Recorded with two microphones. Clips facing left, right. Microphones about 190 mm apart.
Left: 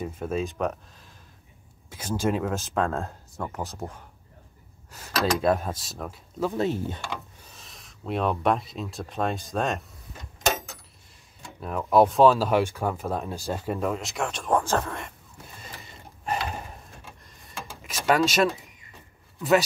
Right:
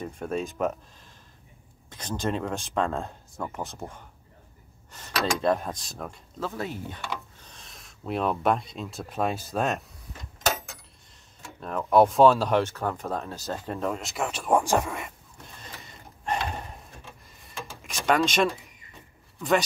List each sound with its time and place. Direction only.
0.0 s speech: 5° left (ahead or behind)
1.9 s speech: 10° left (ahead or behind)
6.4 s speech: 25° left (ahead or behind)
7.4 s speech: centre (ahead or behind)
11.4 s speech: 5° left (ahead or behind)
16.3 s a sound: 5° left (ahead or behind)
17.5 s drawer open or close: centre (ahead or behind)